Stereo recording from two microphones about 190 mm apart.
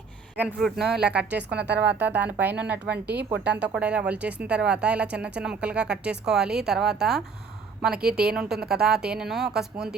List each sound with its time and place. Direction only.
0.4 s speech: 5° right (ahead or behind)
1.4 s speech: 60° right (ahead or behind)
1.8 s a woman's voice: 10° right (ahead or behind)
8.0 s a woman's voice: 55° right (ahead or behind)
8.9 s speech: 5° right (ahead or behind)